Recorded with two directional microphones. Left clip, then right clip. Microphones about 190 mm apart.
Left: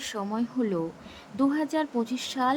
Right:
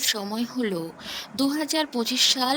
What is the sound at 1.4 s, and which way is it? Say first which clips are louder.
Speech: even; centre (ahead or behind).